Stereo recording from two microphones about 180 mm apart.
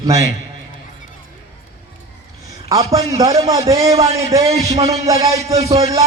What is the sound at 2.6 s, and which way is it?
A man's voice, 20° right (ahead or behind).